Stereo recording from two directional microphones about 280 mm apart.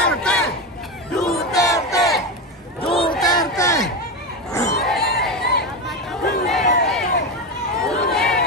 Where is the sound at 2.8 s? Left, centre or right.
Centre.